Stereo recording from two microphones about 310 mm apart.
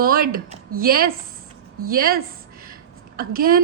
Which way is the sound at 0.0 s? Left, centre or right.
Right.